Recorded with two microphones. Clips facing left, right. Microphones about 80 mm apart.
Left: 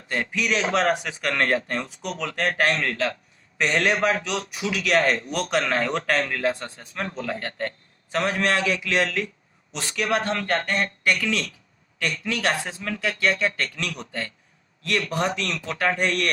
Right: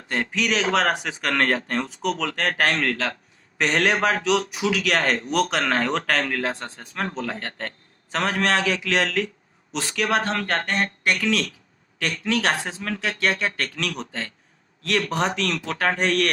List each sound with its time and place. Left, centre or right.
0.3 s speech: right
11.3 s speech: right
13.3 s speech: right
15.4 s speech: right